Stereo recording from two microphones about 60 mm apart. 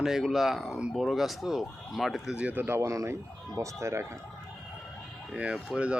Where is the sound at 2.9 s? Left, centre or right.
Right.